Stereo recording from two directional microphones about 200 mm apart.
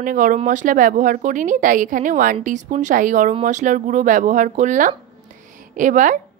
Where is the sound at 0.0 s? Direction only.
40° right (ahead or behind).